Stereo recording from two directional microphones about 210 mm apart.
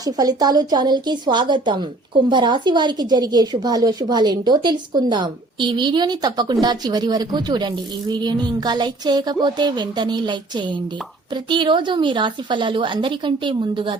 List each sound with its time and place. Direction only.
0.0 s a woman's voice: 20° right (ahead or behind)